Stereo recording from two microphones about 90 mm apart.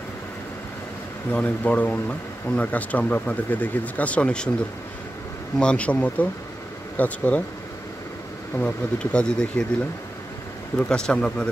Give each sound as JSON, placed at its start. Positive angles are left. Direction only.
{"t": 1.3, "sound": "speech", "side_deg": 15}
{"t": 5.6, "sound": "speech", "side_deg": 15}
{"t": 8.5, "sound": "speech", "side_deg": 15}
{"t": 10.8, "sound": "speech", "side_deg": 10}